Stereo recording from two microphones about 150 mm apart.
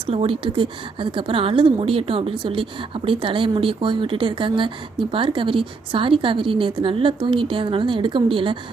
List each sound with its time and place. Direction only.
0.0 s speech: 40° right (ahead or behind)